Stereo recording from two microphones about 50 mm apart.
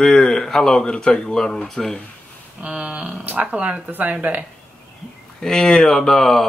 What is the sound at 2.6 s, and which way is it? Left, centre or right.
Speech, right.